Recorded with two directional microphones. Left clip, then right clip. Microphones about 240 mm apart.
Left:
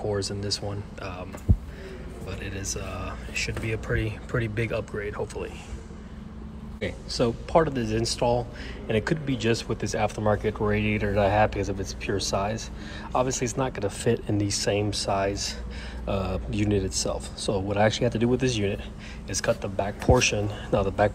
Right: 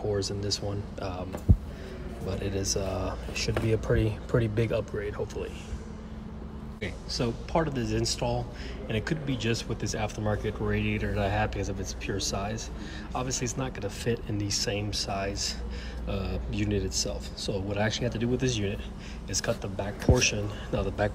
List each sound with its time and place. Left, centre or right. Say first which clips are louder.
0.0 s speech: left 1 dB; centre
2.2 s speech: right 4 dB; centre
6.8 s a man's voice: left 6 dB; centre